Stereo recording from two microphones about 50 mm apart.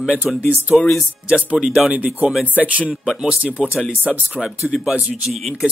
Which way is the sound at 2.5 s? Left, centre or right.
Right.